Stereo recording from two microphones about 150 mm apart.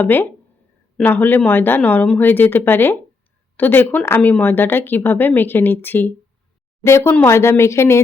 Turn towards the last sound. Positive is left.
turn(degrees=20)  # may be behind; listen again after turning